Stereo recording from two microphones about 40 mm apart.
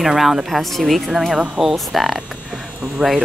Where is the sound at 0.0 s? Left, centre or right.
Centre.